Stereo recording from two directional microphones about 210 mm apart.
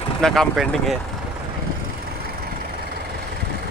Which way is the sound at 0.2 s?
Centre (ahead or behind).